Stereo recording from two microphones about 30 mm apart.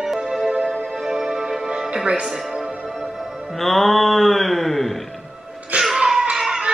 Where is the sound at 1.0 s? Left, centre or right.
Centre.